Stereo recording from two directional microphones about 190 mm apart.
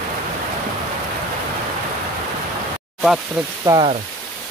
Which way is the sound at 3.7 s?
15° right (ahead or behind).